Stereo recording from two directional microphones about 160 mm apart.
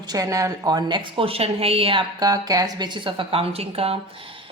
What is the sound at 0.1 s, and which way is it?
A woman's voice, 20° right (ahead or behind).